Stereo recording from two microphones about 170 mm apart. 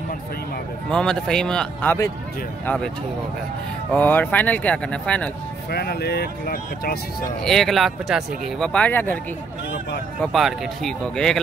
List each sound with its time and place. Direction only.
0.8 s speech: 5° left (ahead or behind)
3.9 s speech: 10° left (ahead or behind)
5.7 s speech: 65° left (ahead or behind)
7.4 s speech: centre (ahead or behind)
10.2 s speech: centre (ahead or behind)